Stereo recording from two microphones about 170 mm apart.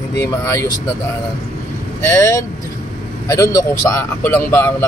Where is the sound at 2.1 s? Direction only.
15° left (ahead or behind).